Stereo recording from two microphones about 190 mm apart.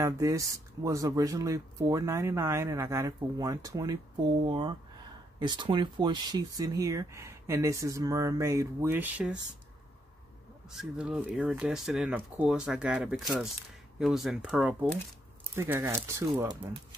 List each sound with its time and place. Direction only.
0.0 s speech: 15° right (ahead or behind)
10.7 s speech: 5° right (ahead or behind)